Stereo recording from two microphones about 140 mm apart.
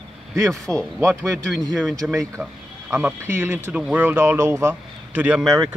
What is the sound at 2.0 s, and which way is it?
A man's voice, 5° right (ahead or behind).